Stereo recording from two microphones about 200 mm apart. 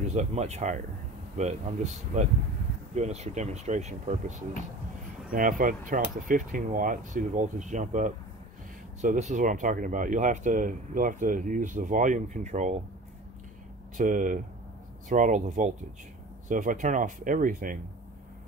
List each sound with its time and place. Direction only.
0.0 s speech: 35° right (ahead or behind)
13.9 s speech: 40° right (ahead or behind)